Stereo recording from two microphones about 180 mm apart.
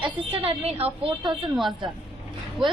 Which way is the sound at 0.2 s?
30° right (ahead or behind).